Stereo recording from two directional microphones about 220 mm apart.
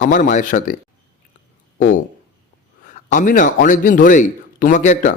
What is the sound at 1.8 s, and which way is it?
A man's voice, 35° left (ahead or behind).